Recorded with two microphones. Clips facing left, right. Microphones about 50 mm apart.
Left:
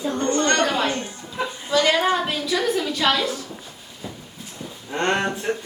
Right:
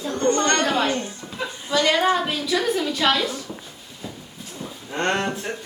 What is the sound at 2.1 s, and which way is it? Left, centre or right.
A woman's voice, centre.